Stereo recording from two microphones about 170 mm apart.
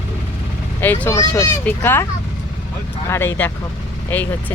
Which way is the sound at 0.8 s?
10° left (ahead or behind).